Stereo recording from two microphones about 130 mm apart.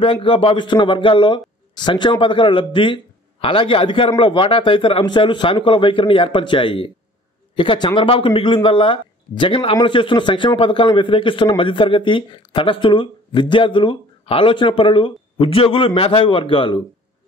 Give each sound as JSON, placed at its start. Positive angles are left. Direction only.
{"t": 0.0, "sound": "speech", "side_deg": 45}